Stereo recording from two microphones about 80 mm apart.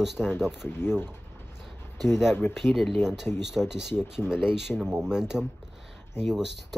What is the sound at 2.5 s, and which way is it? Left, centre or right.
Speech, centre.